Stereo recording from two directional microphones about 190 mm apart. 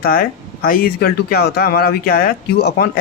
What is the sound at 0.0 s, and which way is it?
Speech, 50° left (ahead or behind).